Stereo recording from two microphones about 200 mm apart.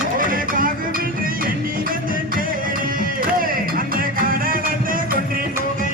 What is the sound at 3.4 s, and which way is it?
Music, 45° right (ahead or behind).